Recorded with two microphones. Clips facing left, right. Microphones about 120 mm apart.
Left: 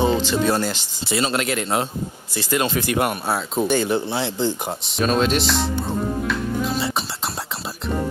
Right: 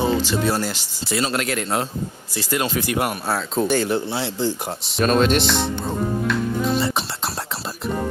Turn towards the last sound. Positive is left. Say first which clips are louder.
# right 2 dB
turn(degrees=0)  # may be behind; listen again after turning